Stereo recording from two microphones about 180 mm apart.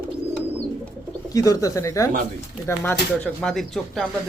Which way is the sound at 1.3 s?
20° left (ahead or behind).